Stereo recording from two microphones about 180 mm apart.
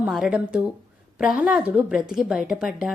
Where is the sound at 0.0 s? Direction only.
5° right (ahead or behind).